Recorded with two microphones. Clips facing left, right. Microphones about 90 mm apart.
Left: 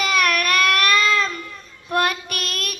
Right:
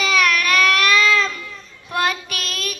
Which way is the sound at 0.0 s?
50° left (ahead or behind).